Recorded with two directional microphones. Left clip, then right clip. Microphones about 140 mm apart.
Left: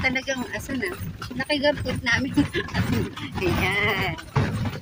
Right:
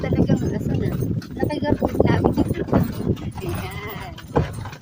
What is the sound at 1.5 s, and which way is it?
Speech, 15° left (ahead or behind).